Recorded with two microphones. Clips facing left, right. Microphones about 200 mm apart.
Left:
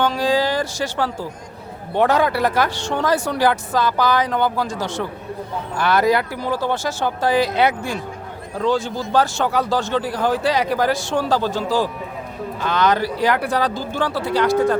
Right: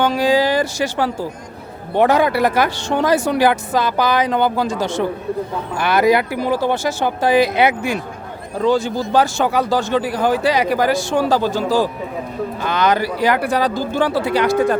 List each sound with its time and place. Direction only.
0.0 s speech: 10° right (ahead or behind)